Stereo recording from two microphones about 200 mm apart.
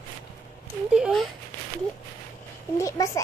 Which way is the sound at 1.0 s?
Centre (ahead or behind).